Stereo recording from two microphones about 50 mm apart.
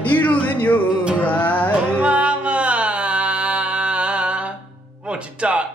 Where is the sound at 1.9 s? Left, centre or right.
Right.